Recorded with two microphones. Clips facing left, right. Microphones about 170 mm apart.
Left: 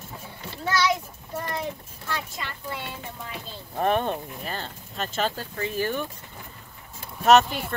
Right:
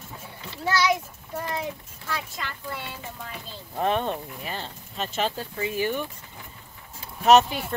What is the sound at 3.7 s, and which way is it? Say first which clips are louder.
Speech: left 1 dB; 10° left (ahead or behind).